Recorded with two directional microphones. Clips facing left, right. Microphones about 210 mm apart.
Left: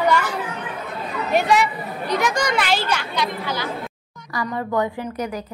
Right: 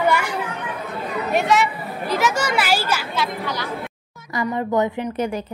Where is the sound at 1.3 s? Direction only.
Centre (ahead or behind).